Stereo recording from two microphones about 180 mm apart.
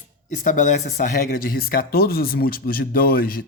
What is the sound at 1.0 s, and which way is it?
Speech, 55° left (ahead or behind).